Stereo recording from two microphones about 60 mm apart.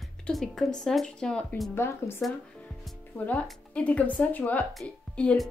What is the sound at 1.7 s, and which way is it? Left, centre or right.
Speech, left.